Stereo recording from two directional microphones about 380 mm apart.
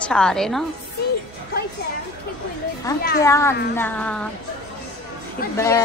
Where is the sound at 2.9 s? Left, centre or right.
Centre.